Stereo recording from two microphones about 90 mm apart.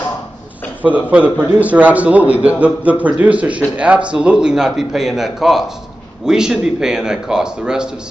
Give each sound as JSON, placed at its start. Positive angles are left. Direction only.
{"t": 0.8, "sound": "a man's voice", "side_deg": -15}